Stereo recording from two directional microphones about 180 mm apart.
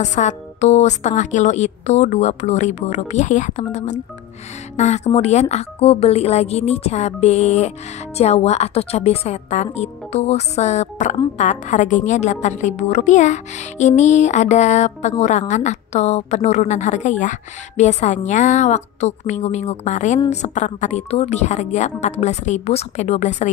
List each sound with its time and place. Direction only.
0.0 s a woman's voice: 40° left (ahead or behind)